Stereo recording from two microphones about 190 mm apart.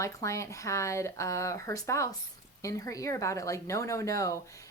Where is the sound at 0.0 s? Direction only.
15° left (ahead or behind).